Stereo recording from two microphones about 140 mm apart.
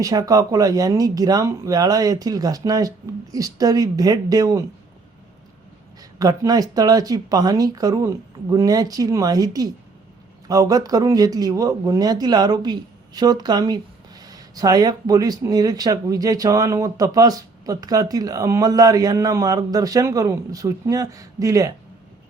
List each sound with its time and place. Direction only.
0.0 s speech: 25° right (ahead or behind)
6.0 s speech: 25° right (ahead or behind)